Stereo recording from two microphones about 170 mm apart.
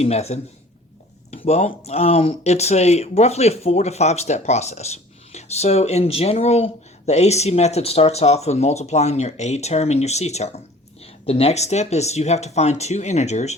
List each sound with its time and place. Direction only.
0.0 s speech: 40° left (ahead or behind)